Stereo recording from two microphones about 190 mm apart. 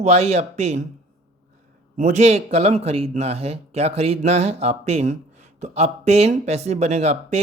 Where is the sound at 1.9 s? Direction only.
40° right (ahead or behind).